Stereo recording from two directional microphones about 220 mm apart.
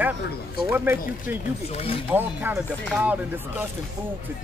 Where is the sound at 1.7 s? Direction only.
25° left (ahead or behind).